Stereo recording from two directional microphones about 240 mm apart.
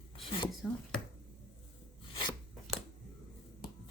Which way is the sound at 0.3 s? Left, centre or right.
Centre.